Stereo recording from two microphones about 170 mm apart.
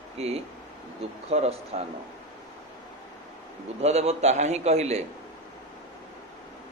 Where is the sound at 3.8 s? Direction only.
40° right (ahead or behind).